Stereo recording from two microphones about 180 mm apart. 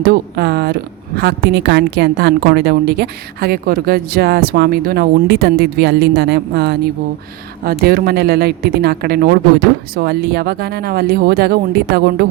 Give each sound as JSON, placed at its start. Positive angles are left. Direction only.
{"t": 0.0, "sound": "a woman's voice", "side_deg": -60}